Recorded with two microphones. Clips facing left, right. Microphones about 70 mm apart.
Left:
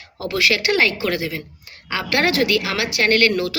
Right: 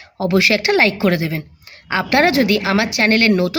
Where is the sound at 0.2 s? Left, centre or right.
Right.